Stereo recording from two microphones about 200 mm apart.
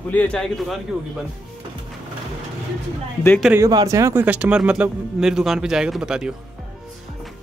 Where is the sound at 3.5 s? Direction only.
20° right (ahead or behind).